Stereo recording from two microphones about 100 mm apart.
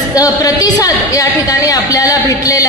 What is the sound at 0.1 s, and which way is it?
A woman's voice, 40° left (ahead or behind).